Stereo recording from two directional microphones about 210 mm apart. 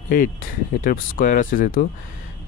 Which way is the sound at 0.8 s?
40° left (ahead or behind).